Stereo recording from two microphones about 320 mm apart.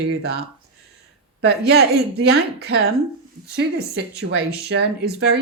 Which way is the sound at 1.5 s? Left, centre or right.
Right.